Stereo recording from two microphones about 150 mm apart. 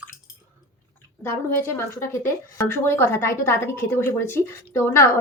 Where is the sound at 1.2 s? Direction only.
15° left (ahead or behind).